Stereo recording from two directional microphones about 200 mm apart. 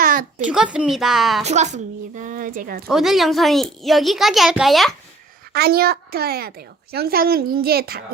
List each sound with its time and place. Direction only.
0.0 s a sound: 40° right (ahead or behind)
0.4 s a child's voice: 5° right (ahead or behind)
1.5 s a woman's voice: 35° right (ahead or behind)
2.8 s a child's voice: centre (ahead or behind)
5.5 s a woman's voice: 50° right (ahead or behind)